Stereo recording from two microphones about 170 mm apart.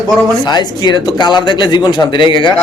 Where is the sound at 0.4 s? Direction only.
25° left (ahead or behind).